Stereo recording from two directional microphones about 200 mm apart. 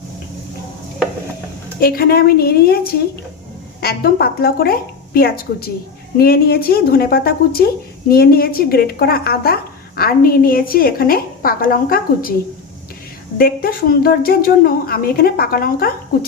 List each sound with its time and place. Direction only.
1.8 s a woman's voice: 50° left (ahead or behind)
13.4 s a woman's voice: 45° left (ahead or behind)